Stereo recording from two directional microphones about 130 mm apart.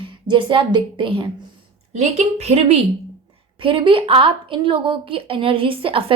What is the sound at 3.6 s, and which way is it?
A woman's voice, 40° right (ahead or behind).